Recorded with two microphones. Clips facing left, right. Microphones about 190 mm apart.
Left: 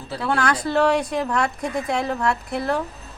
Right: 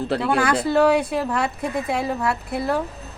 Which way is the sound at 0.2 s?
10° right (ahead or behind).